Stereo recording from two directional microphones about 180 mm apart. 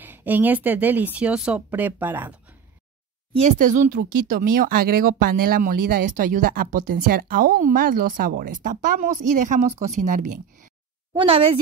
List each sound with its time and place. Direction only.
0.0 s speech: 10° right (ahead or behind)
3.3 s speech: 45° right (ahead or behind)
11.1 s a woman's voice: 30° right (ahead or behind)